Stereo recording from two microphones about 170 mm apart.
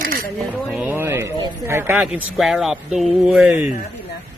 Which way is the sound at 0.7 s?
10° right (ahead or behind).